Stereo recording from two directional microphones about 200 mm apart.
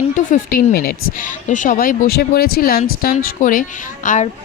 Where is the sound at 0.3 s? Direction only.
45° left (ahead or behind).